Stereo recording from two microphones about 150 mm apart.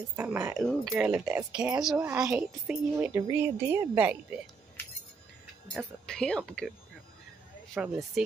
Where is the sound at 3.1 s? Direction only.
20° right (ahead or behind).